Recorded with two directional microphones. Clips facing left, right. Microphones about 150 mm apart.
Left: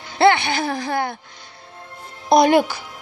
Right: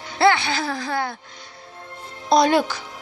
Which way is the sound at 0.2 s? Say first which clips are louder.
Left 3 dB; 55° left (ahead or behind).